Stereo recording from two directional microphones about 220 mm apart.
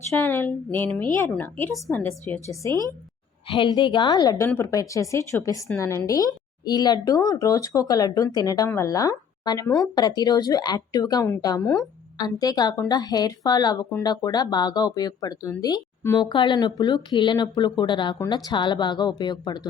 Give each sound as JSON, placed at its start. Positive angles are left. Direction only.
{"t": 0.1, "sound": "speech", "side_deg": 10}